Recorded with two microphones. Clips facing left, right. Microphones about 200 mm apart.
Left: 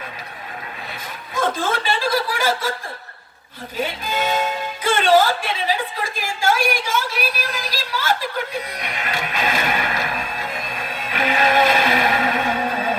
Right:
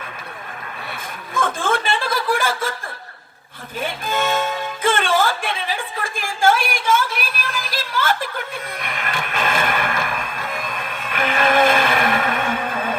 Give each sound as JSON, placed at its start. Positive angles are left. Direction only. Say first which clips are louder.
{"t": 1.3, "sound": "chuckle", "louder": "even", "side_deg": -50}
{"t": 3.8, "sound": "music", "louder": "even", "side_deg": -50}
{"t": 11.1, "sound": "vehicle", "louder": "even", "side_deg": -50}